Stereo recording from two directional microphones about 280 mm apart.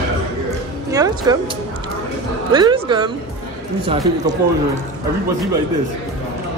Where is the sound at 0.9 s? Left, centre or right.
Centre.